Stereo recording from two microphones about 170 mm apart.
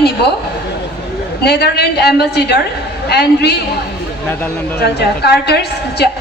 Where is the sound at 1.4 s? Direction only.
75° left (ahead or behind).